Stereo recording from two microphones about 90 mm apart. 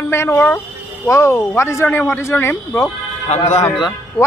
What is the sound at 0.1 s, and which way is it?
Speech, 30° left (ahead or behind).